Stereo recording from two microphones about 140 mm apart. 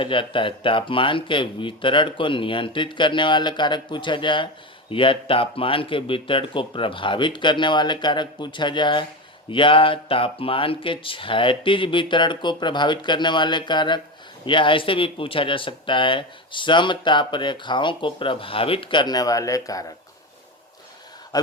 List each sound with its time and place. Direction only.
0.0 s speech: 40° left (ahead or behind)
21.3 s speech: 30° left (ahead or behind)